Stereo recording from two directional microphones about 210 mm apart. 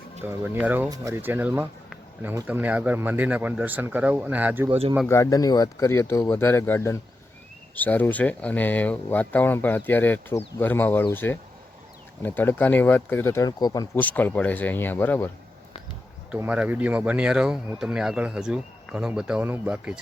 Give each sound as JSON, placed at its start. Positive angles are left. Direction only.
{"t": 0.5, "sound": "speech", "side_deg": -10}
{"t": 4.7, "sound": "speech", "side_deg": -30}
{"t": 5.0, "sound": "speech", "side_deg": 15}
{"t": 16.3, "sound": "speech", "side_deg": -5}